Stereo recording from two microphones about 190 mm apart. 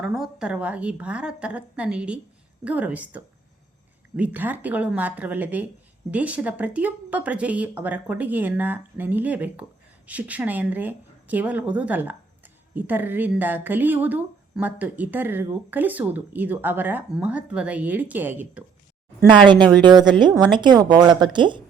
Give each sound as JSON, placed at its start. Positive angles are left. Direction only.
{"t": 0.0, "sound": "a woman's voice", "side_deg": 0}
{"t": 19.5, "sound": "speech", "side_deg": -25}